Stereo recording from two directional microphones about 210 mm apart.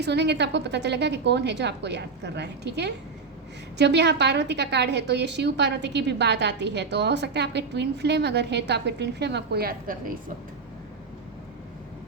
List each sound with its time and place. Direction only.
0.0 s a woman's voice: 55° right (ahead or behind)